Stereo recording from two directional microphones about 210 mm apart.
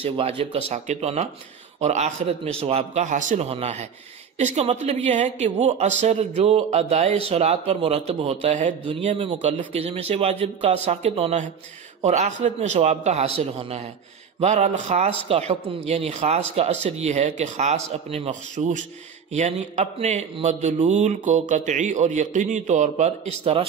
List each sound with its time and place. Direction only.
0.0 s speech: 30° right (ahead or behind)
8.8 s speech: 25° right (ahead or behind)